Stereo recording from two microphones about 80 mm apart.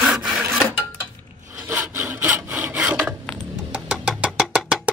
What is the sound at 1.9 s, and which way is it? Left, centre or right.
Sawing, right.